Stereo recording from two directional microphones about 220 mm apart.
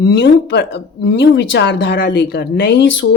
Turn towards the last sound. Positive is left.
turn(degrees=55)  # may be behind; listen again after turning